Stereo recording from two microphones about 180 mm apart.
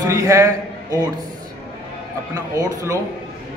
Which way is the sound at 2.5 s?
15° right (ahead or behind).